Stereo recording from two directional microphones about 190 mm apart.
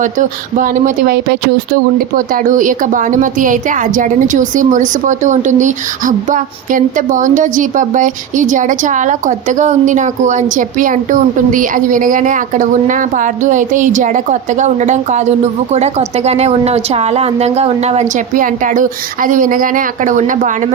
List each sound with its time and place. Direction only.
0.0 s a woman's voice: 40° right (ahead or behind)